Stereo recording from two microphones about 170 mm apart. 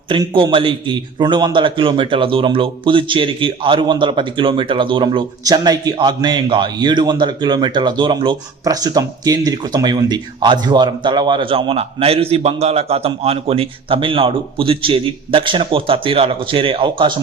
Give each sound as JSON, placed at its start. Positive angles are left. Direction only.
{"t": 0.1, "sound": "a man's voice", "side_deg": -25}